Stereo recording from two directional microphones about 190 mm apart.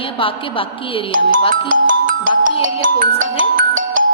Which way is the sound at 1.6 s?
45° right (ahead or behind).